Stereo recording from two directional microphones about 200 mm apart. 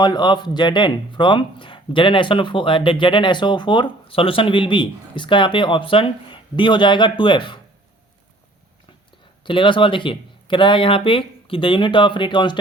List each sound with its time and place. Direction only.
0.0 s speech: 20° left (ahead or behind)
9.4 s speech: 25° left (ahead or behind)